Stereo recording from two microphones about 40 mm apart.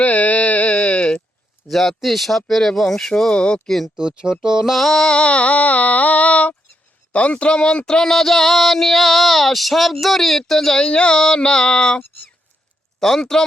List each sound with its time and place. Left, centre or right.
0.0 s a sound: left
1.6 s speech: centre
3.3 s female singing: left
3.9 s speech: centre
4.6 s speech: centre
5.0 s a sound: left
7.1 s female singing: left; by 8.1 s centre
8.1 s speech: centre
10.8 s female singing: left
13.0 s speech: centre